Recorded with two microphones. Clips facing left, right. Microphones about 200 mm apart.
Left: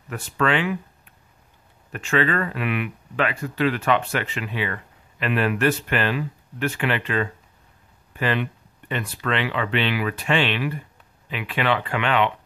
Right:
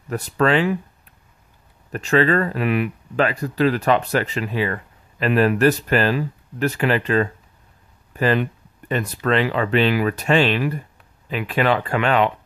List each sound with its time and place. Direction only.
0.1 s speech: 40° right (ahead or behind)
1.9 s speech: 40° right (ahead or behind)